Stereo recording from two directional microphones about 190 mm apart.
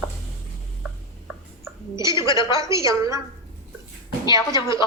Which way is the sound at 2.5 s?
15° right (ahead or behind).